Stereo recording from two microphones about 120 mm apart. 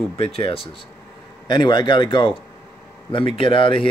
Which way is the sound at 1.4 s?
40° left (ahead or behind).